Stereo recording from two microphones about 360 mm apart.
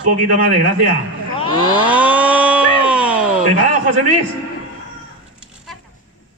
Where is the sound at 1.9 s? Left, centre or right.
Centre.